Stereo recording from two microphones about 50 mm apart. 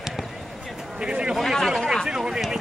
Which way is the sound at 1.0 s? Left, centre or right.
Centre.